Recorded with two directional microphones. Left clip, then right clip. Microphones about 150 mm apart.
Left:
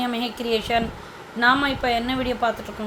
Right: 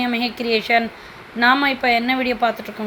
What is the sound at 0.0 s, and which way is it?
A woman's voice, 15° right (ahead or behind).